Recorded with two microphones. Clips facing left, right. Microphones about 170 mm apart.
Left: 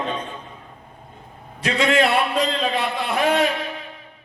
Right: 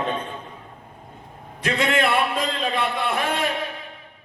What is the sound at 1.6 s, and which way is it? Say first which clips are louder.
A man's voice: left 3 dB; 55° right (ahead or behind).